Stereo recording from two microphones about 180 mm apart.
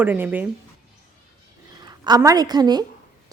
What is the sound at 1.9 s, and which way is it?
Speech, 20° right (ahead or behind).